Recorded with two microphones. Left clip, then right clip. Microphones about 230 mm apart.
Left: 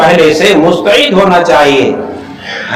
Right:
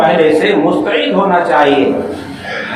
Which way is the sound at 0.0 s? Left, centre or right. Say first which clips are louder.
Left 4 dB; left.